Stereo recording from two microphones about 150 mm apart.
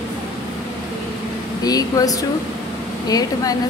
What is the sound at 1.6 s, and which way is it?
A woman's voice, 25° left (ahead or behind).